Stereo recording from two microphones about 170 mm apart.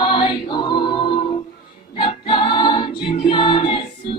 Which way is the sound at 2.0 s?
30° left (ahead or behind).